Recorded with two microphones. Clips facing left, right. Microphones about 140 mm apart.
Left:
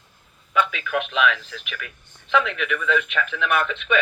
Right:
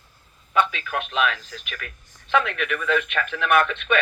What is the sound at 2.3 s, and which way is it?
Speech, 50° right (ahead or behind).